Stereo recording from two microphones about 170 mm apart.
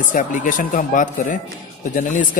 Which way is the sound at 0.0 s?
50° left (ahead or behind).